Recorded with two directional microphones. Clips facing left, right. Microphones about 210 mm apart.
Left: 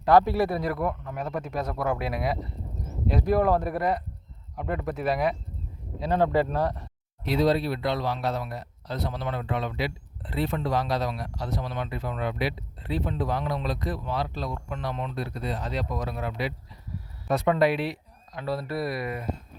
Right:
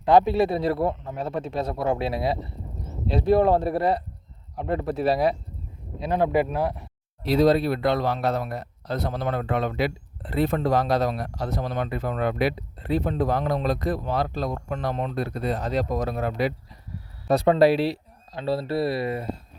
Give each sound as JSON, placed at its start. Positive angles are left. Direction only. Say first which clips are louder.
{"t": 0.0, "sound": "a man's voice", "louder": "right 2 dB", "side_deg": -20}
{"t": 6.0, "sound": "speech", "louder": "right 1 dB", "side_deg": -15}
{"t": 7.2, "sound": "speech", "louder": "right 4 dB", "side_deg": -40}
{"t": 17.2, "sound": "speech", "louder": "right 5 dB", "side_deg": -35}